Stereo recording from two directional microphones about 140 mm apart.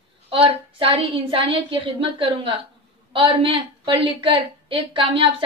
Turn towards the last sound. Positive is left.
turn(degrees=-40)  # may be behind; listen again after turning